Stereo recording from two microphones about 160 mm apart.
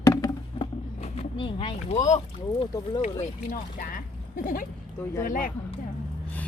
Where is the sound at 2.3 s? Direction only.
30° left (ahead or behind).